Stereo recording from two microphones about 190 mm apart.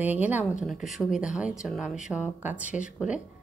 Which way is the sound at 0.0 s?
10° right (ahead or behind).